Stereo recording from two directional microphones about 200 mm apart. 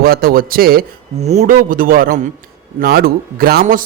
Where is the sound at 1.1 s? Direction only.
35° right (ahead or behind).